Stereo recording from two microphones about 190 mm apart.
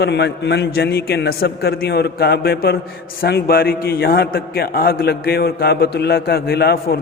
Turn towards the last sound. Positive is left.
turn(degrees=55)  # may be behind; listen again after turning